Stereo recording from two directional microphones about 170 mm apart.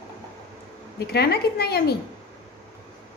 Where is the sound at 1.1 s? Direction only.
70° left (ahead or behind).